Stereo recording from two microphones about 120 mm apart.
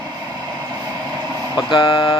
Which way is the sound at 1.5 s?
45° left (ahead or behind).